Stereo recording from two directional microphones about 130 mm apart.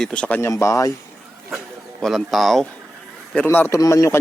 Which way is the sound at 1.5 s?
Centre (ahead or behind).